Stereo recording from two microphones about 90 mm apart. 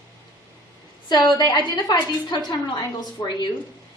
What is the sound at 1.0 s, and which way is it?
A woman's voice, 55° left (ahead or behind).